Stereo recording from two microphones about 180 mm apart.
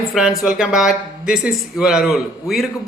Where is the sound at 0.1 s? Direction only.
5° right (ahead or behind).